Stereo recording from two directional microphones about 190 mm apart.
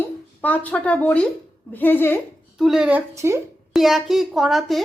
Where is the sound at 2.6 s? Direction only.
5° right (ahead or behind).